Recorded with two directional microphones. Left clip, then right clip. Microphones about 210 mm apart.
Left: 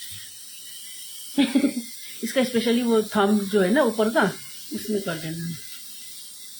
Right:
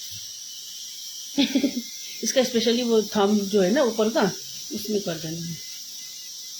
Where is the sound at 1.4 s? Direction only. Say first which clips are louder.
Left 1 dB; 5° right (ahead or behind).